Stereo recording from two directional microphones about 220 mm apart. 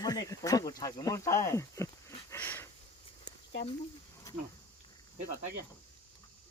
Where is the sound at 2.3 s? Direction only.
10° left (ahead or behind).